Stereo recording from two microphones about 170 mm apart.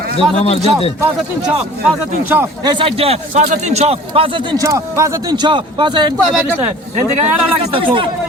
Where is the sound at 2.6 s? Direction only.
30° right (ahead or behind).